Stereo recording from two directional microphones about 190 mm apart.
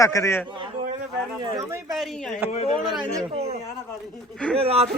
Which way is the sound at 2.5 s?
35° left (ahead or behind).